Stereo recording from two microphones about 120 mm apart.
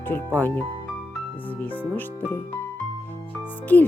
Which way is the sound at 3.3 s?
15° left (ahead or behind).